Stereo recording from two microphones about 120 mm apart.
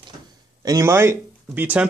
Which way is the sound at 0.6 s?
30° right (ahead or behind).